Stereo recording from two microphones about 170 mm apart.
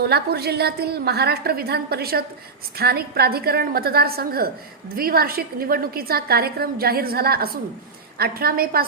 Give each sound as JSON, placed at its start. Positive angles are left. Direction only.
{"t": 0.0, "sound": "a woman's voice", "side_deg": -70}